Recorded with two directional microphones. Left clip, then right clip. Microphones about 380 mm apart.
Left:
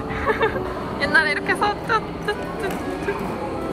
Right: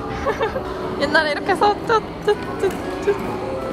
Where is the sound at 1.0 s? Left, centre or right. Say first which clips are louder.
Even; centre.